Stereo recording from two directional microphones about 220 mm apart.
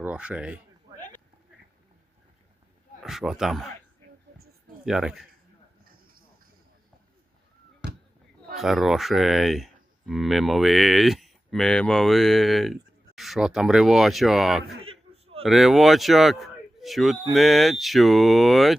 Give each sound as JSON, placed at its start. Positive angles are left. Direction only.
{"t": 0.0, "sound": "speech", "side_deg": -5}
{"t": 3.0, "sound": "speech", "side_deg": 0}
{"t": 4.9, "sound": "speech", "side_deg": 0}
{"t": 7.8, "sound": "basketball bounce", "side_deg": -5}
{"t": 8.5, "sound": "speech", "side_deg": 0}
{"t": 14.8, "sound": "a sound", "side_deg": -25}
{"t": 15.4, "sound": "speech", "side_deg": 0}